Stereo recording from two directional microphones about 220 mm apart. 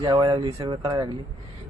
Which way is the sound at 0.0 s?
20° right (ahead or behind).